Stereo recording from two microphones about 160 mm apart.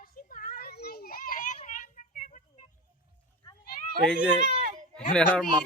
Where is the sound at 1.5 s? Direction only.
45° left (ahead or behind).